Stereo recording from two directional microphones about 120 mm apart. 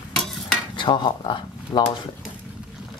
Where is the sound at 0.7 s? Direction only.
40° left (ahead or behind).